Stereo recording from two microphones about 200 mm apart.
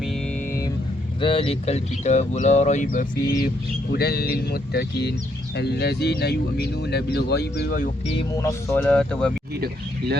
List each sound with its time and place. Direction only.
1.2 s speech: 25° left (ahead or behind); by 7.9 s 45° left (ahead or behind)
8.3 s speech: 15° left (ahead or behind)